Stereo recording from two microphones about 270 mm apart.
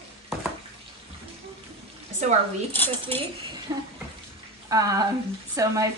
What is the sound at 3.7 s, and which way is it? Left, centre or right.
Speech, centre.